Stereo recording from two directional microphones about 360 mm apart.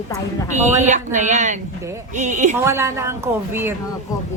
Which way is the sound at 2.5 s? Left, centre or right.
Centre.